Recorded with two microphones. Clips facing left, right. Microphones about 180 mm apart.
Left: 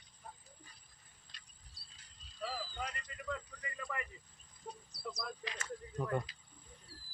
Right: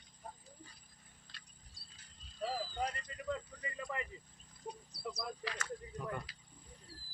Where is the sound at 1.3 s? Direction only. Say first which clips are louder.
Right 1 dB; 20° left (ahead or behind).